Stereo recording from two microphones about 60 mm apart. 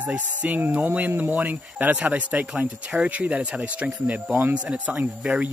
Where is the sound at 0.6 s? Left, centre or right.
Right.